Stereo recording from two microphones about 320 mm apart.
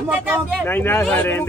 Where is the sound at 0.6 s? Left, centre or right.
Centre.